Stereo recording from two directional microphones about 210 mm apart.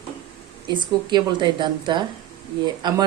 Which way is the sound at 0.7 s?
20° right (ahead or behind).